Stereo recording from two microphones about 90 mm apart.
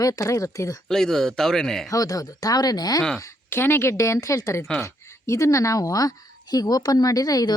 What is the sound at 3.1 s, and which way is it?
Speech, 25° left (ahead or behind).